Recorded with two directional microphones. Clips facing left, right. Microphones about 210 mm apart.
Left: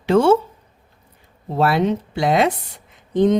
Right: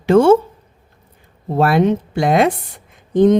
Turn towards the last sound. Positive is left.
turn(degrees=-50)  # may be behind; listen again after turning